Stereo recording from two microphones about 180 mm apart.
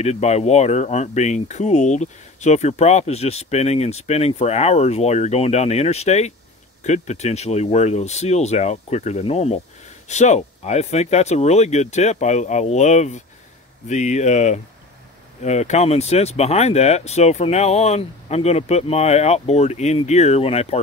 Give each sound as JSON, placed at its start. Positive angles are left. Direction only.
{"t": 0.0, "sound": "speech", "side_deg": 35}